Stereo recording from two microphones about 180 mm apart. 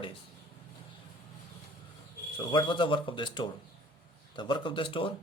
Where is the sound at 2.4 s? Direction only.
25° left (ahead or behind).